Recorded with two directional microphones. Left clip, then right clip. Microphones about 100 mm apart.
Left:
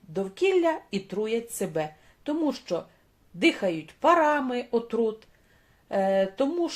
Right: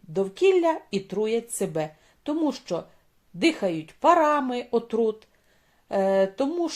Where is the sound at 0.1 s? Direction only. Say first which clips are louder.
Right 4 dB; 35° right (ahead or behind).